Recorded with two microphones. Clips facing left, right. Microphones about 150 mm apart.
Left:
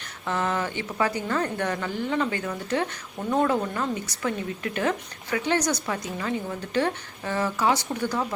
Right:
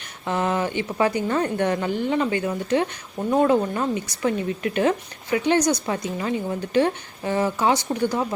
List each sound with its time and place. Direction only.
0.3 s a woman's voice: 20° right (ahead or behind)